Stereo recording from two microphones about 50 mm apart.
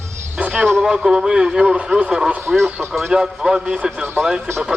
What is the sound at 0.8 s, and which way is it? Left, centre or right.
A man's voice, centre.